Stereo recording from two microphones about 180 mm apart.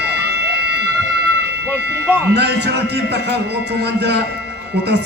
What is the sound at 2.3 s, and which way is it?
A man's voice, 70° right (ahead or behind).